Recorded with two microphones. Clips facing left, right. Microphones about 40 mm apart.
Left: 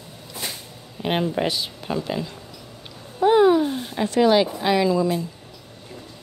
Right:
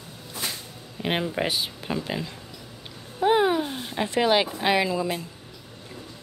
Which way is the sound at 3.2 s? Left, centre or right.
Centre.